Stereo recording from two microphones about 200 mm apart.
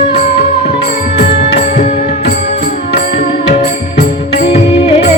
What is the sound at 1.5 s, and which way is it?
Music, 35° left (ahead or behind).